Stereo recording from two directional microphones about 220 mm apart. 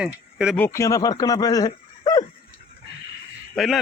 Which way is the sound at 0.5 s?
10° left (ahead or behind).